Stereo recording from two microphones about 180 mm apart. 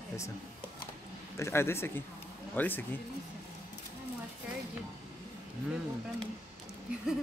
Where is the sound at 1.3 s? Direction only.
15° left (ahead or behind).